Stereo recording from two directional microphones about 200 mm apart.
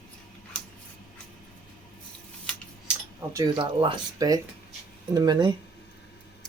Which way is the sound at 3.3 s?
20° right (ahead or behind).